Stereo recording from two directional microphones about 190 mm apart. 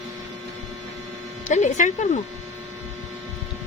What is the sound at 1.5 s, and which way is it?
Speech, 40° left (ahead or behind).